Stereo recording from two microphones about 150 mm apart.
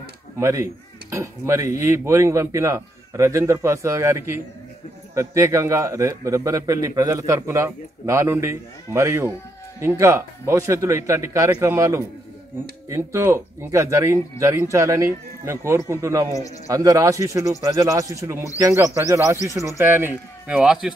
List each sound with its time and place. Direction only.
0.4 s a man's voice: 20° right (ahead or behind); by 20.9 s 5° right (ahead or behind)